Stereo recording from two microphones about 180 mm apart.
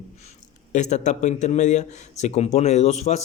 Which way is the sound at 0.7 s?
40° left (ahead or behind).